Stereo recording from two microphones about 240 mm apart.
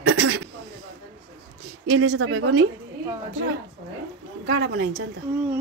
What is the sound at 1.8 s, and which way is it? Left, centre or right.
Speech, right.